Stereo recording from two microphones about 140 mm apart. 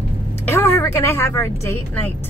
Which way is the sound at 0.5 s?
20° left (ahead or behind).